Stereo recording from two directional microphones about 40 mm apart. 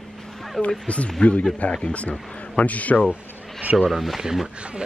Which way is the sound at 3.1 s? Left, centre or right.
Right.